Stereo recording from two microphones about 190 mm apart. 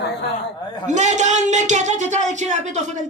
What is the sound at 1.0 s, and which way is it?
Speech, 40° right (ahead or behind).